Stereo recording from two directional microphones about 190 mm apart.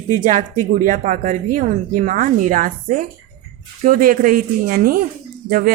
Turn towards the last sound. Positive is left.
turn(degrees=-50)  # may be behind; listen again after turning